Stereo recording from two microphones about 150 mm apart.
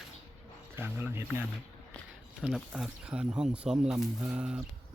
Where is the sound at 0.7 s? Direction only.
15° right (ahead or behind).